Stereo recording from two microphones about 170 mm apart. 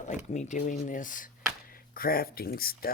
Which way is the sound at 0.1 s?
45° left (ahead or behind).